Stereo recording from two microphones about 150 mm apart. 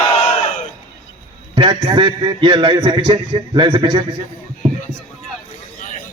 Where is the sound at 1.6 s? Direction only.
30° right (ahead or behind).